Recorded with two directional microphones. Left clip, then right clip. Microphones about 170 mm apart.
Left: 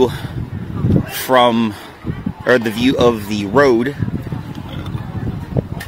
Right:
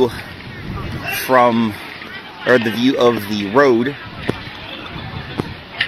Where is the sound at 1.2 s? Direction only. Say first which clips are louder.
Even; 20° left (ahead or behind).